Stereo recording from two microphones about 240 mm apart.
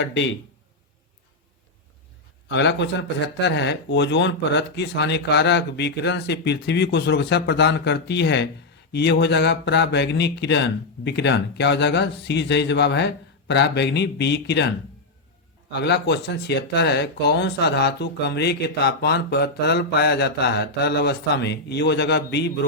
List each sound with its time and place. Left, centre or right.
2.5 s speech: left
15.7 s speech: left